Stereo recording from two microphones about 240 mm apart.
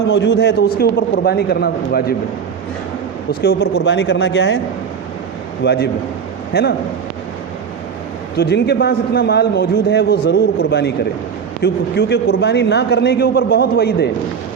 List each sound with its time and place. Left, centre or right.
0.1 s a man's voice: left
3.4 s a man's voice: left
5.6 s a man's voice: left
8.4 s a man's voice: left